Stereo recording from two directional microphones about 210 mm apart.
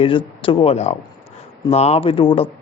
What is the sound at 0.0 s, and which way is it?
Speech, 25° left (ahead or behind).